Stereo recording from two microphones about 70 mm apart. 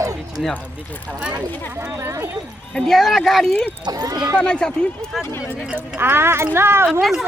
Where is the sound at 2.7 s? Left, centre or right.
Centre.